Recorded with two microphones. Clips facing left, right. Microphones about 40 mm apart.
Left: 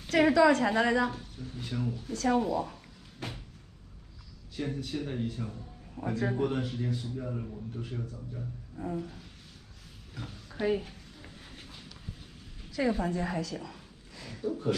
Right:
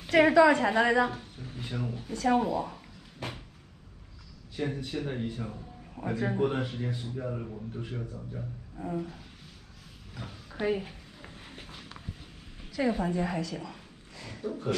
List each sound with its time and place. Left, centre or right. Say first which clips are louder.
0.0 s speech: right 2 dB; centre
4.6 s speech: right 1 dB; centre
8.9 s a sound: right 2 dB; centre
12.7 s a woman's voice: right 1 dB; centre